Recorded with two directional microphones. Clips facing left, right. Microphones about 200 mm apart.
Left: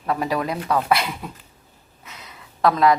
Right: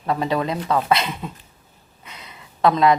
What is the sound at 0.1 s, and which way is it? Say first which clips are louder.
Speech: right 1 dB; 25° right (ahead or behind).